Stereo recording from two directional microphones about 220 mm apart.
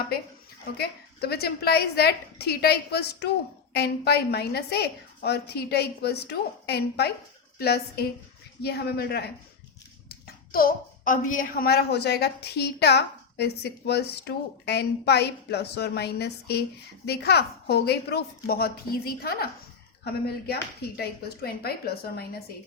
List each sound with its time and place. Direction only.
0.8 s a woman's voice: 45° left (ahead or behind)